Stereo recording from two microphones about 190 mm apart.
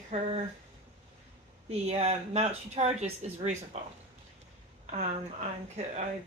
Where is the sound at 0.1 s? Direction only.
35° right (ahead or behind).